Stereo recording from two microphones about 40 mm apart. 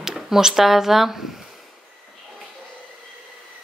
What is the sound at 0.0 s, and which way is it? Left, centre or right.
Speech, centre.